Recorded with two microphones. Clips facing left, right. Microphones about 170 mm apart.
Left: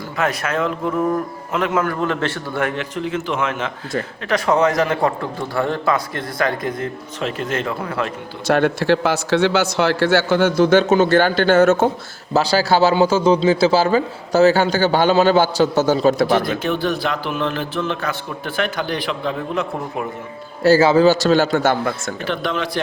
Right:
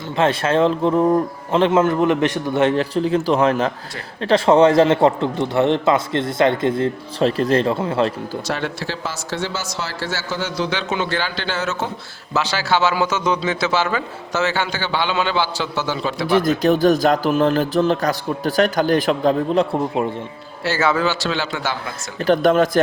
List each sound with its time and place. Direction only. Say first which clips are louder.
0.2 s a man's voice: right 5 dB; 30° right (ahead or behind)
2.7 s a man's voice: right 5 dB; 35° right (ahead or behind)
8.4 s speech: left 12 dB; 55° left (ahead or behind)
12.3 s a man's voice: left 4 dB; 35° left (ahead or behind)
16.4 s a man's voice: right 5 dB; 40° right (ahead or behind)
20.7 s speech: left 7 dB; 30° left (ahead or behind); by 22.1 s 50° left (ahead or behind)
22.2 s speech: right 10 dB; 45° right (ahead or behind)